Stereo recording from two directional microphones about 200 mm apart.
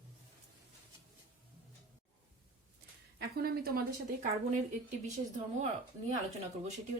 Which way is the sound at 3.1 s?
50° right (ahead or behind).